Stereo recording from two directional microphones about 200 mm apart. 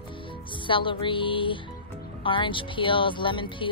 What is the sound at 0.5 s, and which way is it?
Speech, 25° left (ahead or behind).